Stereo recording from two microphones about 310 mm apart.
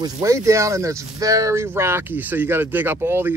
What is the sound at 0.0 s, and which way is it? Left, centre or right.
Speech, centre.